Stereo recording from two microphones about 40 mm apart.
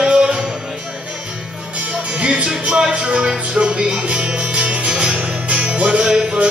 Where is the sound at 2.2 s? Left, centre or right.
Right.